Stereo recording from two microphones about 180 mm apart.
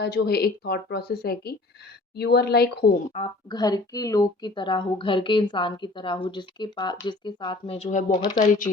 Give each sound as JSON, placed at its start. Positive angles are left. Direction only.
{"t": 0.0, "sound": "speech", "side_deg": 60}
{"t": 3.2, "sound": "a woman's voice", "side_deg": 20}